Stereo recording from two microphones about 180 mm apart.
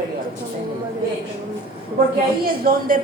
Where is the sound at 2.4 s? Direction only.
55° right (ahead or behind).